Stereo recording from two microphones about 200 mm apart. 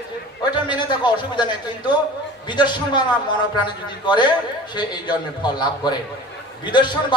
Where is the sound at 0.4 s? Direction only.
20° left (ahead or behind).